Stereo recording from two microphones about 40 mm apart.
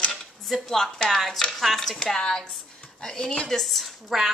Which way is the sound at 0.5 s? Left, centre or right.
Centre.